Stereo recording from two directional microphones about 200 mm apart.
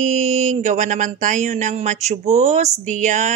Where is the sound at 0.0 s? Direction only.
40° right (ahead or behind).